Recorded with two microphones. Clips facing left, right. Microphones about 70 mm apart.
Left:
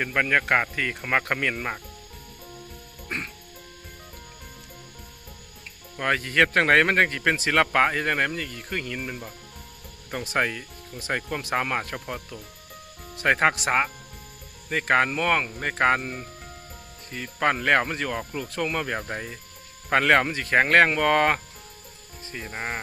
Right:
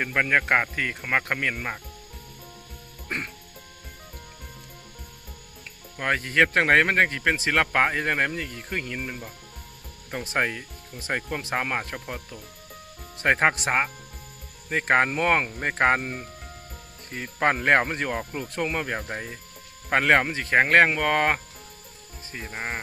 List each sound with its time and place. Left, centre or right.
0.0 s speech: centre
3.1 s music: right
6.0 s speech: centre
10.3 s speech: centre
17.1 s speech: right; by 21.4 s centre
22.4 s speech: centre